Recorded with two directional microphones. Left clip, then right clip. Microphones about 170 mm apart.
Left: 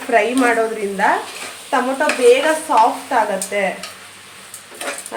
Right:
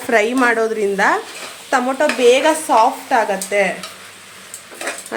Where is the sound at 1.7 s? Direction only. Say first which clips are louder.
Right 1 dB; 90° right.